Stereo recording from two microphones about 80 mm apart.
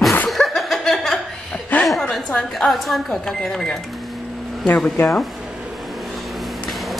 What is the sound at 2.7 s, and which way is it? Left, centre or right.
Speech, centre.